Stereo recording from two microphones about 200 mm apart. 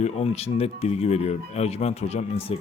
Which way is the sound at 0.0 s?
30° left (ahead or behind).